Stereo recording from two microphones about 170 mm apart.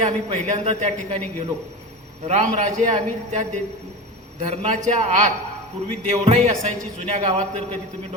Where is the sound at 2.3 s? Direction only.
45° right (ahead or behind).